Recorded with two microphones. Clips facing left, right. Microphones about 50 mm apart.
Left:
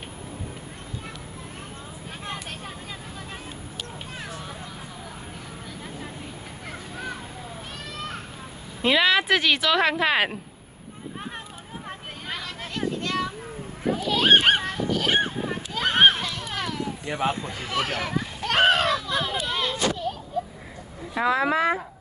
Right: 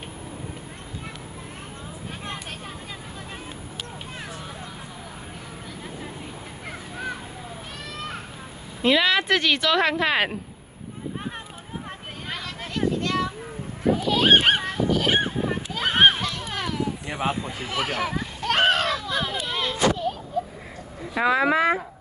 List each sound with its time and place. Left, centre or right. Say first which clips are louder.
2.2 s vehicle: left 2 dB; centre
8.8 s speech: even; centre
12.3 s a sound: even; centre
21.2 s speech: right 2 dB; right